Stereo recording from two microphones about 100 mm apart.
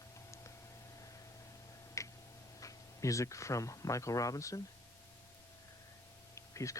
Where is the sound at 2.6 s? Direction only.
35° left (ahead or behind).